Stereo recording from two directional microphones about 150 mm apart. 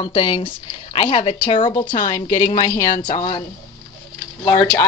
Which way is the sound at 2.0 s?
20° left (ahead or behind).